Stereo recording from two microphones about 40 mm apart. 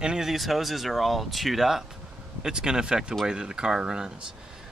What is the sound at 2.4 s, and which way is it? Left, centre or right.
Speech, centre.